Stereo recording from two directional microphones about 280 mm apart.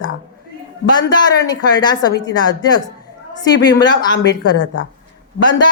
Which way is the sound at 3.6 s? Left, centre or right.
Centre.